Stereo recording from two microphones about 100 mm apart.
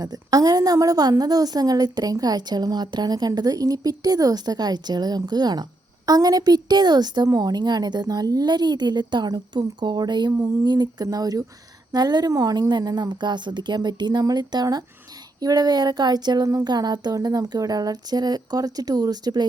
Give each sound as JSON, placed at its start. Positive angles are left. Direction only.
{"t": 0.0, "sound": "a woman's voice", "side_deg": -40}